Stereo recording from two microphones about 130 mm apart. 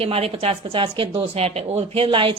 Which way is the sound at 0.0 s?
50° right (ahead or behind).